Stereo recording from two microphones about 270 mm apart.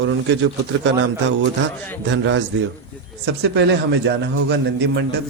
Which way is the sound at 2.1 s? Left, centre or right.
Right.